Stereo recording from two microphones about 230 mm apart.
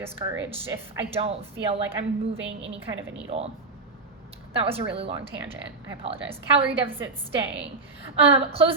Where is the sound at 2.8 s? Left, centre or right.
Centre.